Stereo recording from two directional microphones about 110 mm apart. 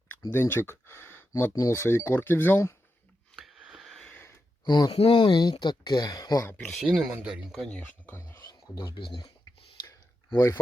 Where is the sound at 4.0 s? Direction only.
15° left (ahead or behind).